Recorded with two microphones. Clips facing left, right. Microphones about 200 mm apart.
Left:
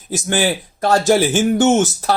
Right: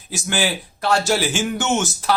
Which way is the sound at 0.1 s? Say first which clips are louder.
Left 5 dB; 45° left (ahead or behind).